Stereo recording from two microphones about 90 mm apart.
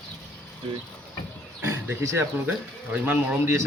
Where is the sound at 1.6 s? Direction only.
30° right (ahead or behind).